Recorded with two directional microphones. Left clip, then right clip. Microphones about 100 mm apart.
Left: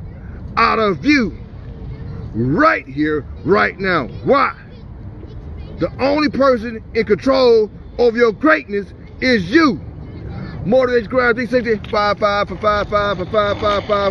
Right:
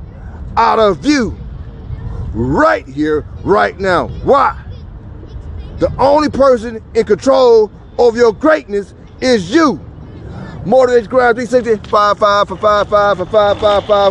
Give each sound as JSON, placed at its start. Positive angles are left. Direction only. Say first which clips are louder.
{"t": 0.6, "sound": "a man's voice", "louder": "right 5 dB", "side_deg": 5}
{"t": 2.4, "sound": "a man's voice", "louder": "right 3 dB", "side_deg": 5}
{"t": 5.8, "sound": "a man's voice", "louder": "right 6 dB", "side_deg": 5}
{"t": 13.6, "sound": "speech", "louder": "right 6 dB", "side_deg": 35}